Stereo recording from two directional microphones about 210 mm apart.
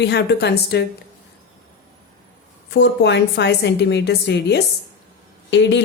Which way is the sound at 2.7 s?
55° left (ahead or behind).